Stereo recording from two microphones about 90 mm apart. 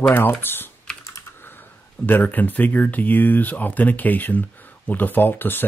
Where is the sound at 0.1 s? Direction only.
20° left (ahead or behind).